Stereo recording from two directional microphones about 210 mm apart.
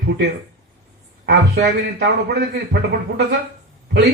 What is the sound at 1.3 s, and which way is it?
A man's voice, 50° right (ahead or behind).